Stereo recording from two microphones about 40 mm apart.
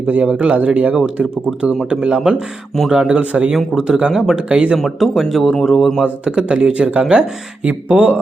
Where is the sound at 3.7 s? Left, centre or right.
Centre.